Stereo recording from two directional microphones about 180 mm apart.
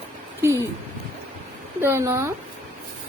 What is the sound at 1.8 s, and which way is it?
Speech, 15° right (ahead or behind).